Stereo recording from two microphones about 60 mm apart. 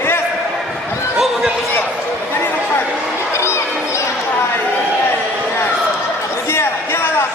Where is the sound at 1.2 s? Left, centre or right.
Centre.